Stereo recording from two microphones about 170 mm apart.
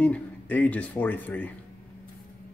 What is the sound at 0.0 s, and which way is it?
Speech, 10° left (ahead or behind).